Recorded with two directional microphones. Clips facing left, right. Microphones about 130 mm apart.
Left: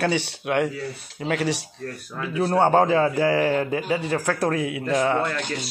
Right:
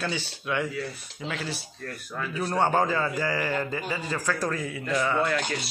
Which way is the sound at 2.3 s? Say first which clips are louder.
Left 6 dB; 60° left (ahead or behind).